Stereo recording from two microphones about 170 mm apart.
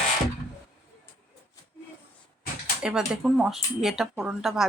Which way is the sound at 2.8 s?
5° right (ahead or behind).